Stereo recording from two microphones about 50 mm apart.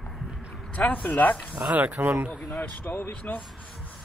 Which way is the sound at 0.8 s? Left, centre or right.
Left.